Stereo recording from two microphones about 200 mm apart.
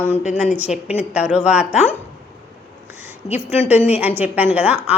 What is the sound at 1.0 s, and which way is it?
Speech, 5° right (ahead or behind).